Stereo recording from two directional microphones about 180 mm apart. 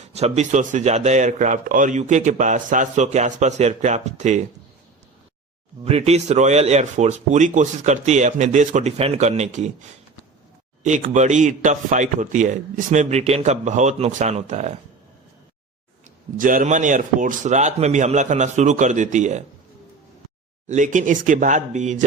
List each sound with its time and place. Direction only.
0.0 s speech: 35° right (ahead or behind)
5.8 s speech: 35° right (ahead or behind)
10.8 s speech: 40° right (ahead or behind)
16.4 s speech: 50° right (ahead or behind)
20.7 s speech: 45° right (ahead or behind)